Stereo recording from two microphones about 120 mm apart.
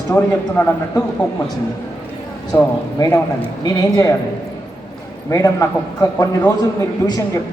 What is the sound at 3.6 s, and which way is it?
Speech, 35° left (ahead or behind).